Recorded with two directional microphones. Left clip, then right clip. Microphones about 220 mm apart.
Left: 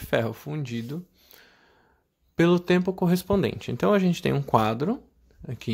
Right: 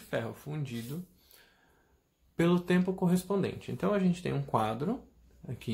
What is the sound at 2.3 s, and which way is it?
Speech, 35° left (ahead or behind).